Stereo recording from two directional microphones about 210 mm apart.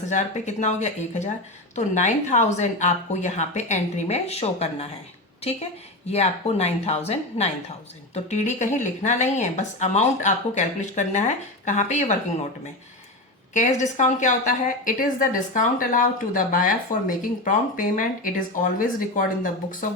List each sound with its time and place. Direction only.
0.1 s a woman's voice: 35° left (ahead or behind)
6.1 s a woman's voice: 30° left (ahead or behind)
13.5 s a woman's voice: 35° left (ahead or behind)